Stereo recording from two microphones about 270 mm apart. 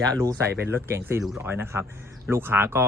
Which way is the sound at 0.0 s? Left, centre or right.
Centre.